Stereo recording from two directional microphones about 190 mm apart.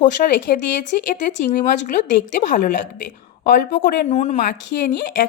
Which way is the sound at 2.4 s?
45° left (ahead or behind).